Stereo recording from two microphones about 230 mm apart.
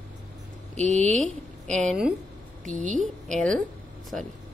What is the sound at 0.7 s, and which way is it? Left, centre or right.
Speech, right.